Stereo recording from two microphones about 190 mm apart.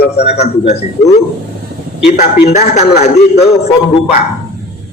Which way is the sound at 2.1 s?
40° left (ahead or behind).